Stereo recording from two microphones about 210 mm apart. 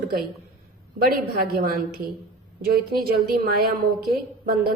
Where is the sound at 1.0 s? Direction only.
45° right (ahead or behind).